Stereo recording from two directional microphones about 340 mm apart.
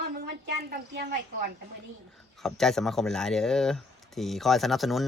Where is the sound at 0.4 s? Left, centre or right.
Right.